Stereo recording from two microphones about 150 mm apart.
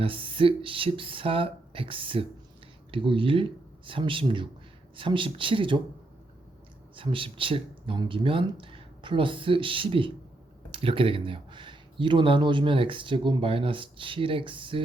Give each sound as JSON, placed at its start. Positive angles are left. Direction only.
{"t": 0.0, "sound": "speech", "side_deg": -35}
{"t": 6.9, "sound": "speech", "side_deg": -35}